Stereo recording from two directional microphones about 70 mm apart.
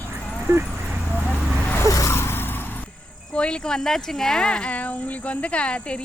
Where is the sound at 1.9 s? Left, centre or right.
Left.